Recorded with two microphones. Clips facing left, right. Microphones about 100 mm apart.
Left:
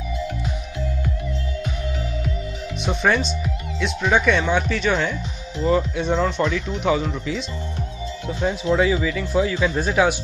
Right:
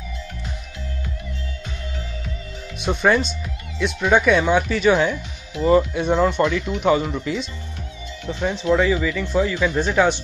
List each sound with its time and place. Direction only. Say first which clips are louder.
2.8 s speech: right 2 dB; centre (ahead or behind)
8.4 s speech: right 1 dB; 20° left (ahead or behind)
8.7 s speech: right 1 dB; 5° left (ahead or behind)